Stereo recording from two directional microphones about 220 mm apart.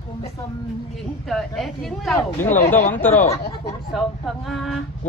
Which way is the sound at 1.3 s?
Centre (ahead or behind).